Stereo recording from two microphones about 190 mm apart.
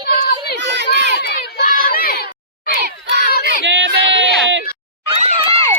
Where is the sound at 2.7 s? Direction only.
60° right (ahead or behind).